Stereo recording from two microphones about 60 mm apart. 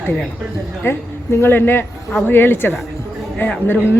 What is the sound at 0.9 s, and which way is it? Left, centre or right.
A man's voice, left.